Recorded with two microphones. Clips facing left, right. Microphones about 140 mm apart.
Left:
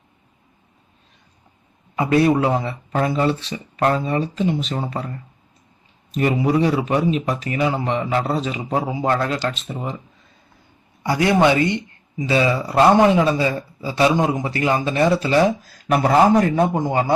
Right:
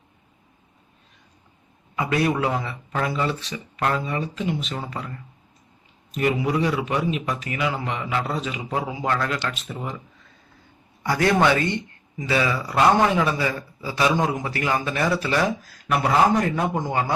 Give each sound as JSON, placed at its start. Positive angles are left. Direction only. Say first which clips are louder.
{"t": 2.0, "sound": "speech", "louder": "left 6 dB", "side_deg": 30}
{"t": 6.1, "sound": "a man's voice", "louder": "left 4 dB", "side_deg": 35}
{"t": 11.0, "sound": "a man's voice", "louder": "left 3 dB", "side_deg": 20}